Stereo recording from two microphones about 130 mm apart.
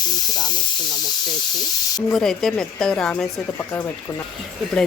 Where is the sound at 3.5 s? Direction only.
15° left (ahead or behind).